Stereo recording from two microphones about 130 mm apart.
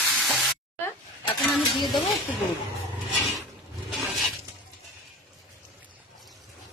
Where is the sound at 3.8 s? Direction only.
Centre (ahead or behind).